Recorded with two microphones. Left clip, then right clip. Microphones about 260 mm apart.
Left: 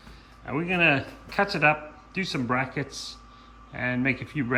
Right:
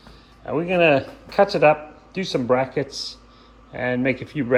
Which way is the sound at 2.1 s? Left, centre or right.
Centre.